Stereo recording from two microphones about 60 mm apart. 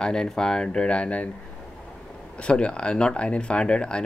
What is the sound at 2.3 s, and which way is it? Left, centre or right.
Speech, centre.